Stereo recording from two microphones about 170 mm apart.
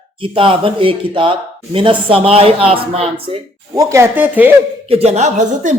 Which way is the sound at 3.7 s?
15° right (ahead or behind).